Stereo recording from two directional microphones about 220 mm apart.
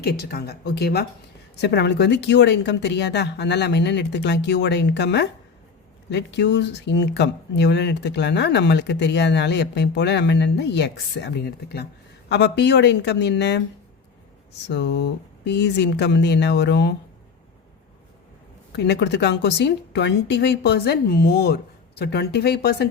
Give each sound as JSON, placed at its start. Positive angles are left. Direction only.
{"t": 0.0, "sound": "speech", "side_deg": 45}
{"t": 14.7, "sound": "speech", "side_deg": 50}
{"t": 18.8, "sound": "speech", "side_deg": 50}